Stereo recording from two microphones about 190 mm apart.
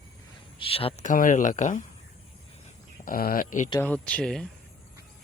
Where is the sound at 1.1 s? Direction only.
45° left (ahead or behind).